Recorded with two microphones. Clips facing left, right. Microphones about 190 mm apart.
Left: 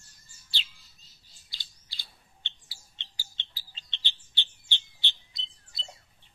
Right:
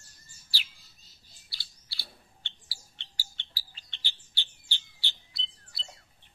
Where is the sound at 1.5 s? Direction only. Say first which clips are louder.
Left 1 dB; 20° left (ahead or behind).